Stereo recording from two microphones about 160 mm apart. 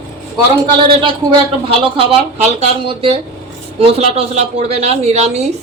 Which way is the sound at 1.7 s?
35° right (ahead or behind).